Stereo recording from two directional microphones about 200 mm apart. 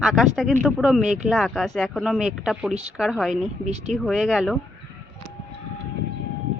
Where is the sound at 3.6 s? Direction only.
35° right (ahead or behind).